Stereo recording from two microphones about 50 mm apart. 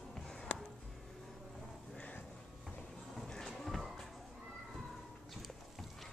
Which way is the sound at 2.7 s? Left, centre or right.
Centre.